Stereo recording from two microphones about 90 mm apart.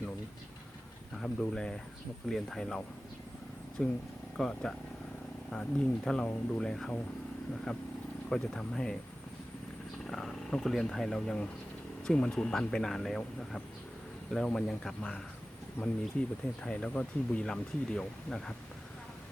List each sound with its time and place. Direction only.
1.2 s speech: 10° left (ahead or behind)
10.1 s speech: 5° left (ahead or behind)
15.8 s speech: 30° left (ahead or behind)
16.6 s speech: 10° left (ahead or behind)